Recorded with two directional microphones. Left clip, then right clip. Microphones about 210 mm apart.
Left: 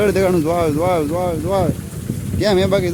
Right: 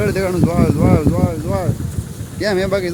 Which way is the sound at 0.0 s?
20° left (ahead or behind).